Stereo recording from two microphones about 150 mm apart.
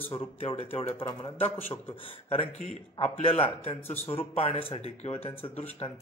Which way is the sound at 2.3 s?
40° left (ahead or behind).